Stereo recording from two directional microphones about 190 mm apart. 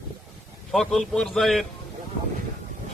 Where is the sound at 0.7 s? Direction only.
Centre (ahead or behind).